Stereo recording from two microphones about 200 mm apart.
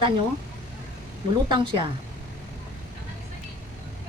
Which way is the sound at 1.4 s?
25° right (ahead or behind).